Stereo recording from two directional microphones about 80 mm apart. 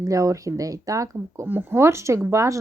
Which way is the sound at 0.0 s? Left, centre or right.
Right.